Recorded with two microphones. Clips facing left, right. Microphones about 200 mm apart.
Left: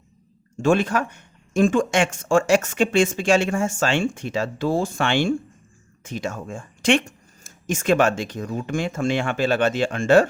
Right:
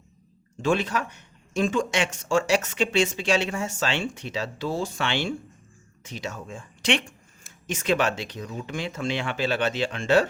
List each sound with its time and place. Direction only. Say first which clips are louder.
0.6 s speech: left 5 dB; 50° left (ahead or behind)